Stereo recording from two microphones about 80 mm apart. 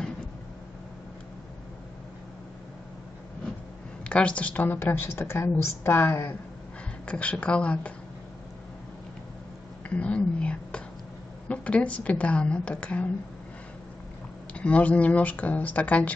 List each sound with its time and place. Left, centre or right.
4.0 s a woman's voice: centre
9.8 s a woman's voice: centre
14.5 s a woman's voice: centre